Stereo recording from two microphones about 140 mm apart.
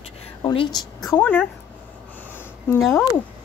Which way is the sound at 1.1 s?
15° left (ahead or behind).